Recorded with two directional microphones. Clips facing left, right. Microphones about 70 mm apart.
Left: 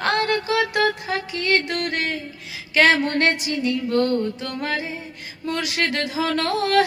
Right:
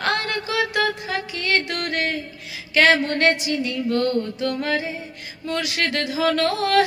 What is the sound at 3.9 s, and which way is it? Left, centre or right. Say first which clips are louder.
Mantra: even; left.